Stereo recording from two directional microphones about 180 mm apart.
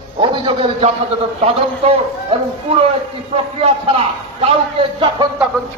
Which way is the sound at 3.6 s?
35° right (ahead or behind).